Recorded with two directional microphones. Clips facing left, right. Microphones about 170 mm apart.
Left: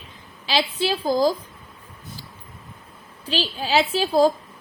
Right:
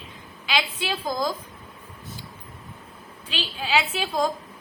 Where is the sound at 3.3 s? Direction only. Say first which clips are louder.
Left 4 dB; 35° left (ahead or behind).